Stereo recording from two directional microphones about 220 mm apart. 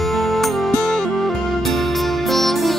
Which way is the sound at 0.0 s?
Centre (ahead or behind).